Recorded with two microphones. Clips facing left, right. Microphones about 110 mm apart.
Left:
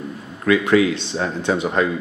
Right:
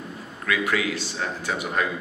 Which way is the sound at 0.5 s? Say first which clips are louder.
Left 9 dB; 25° left (ahead or behind).